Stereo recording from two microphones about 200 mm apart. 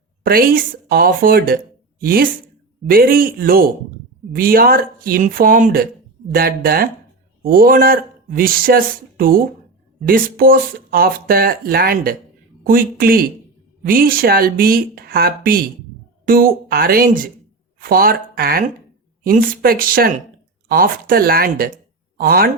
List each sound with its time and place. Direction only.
0.2 s speech: 45° right (ahead or behind)